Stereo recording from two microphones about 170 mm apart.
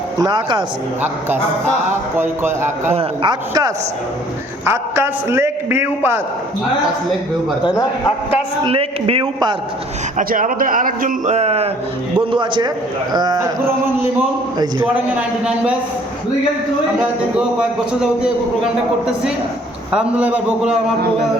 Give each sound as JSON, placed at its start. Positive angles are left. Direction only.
{"t": 0.2, "sound": "a man's voice", "side_deg": -25}
{"t": 2.1, "sound": "a man's voice", "side_deg": -15}
{"t": 2.9, "sound": "a man's voice", "side_deg": -35}
{"t": 4.6, "sound": "a man's voice", "side_deg": -15}
{"t": 7.6, "sound": "a man's voice", "side_deg": 25}
{"t": 8.6, "sound": "a man's voice", "side_deg": -35}
{"t": 10.2, "sound": "a man's voice", "side_deg": -50}
{"t": 12.3, "sound": "a man's voice", "side_deg": -25}
{"t": 14.9, "sound": "a man's voice", "side_deg": -5}
{"t": 17.0, "sound": "a man's voice", "side_deg": -5}